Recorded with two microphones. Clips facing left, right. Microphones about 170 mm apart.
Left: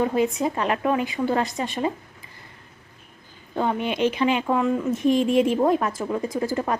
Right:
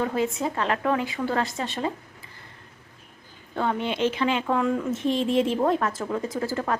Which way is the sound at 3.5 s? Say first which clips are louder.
Left 2 dB; 15° left (ahead or behind).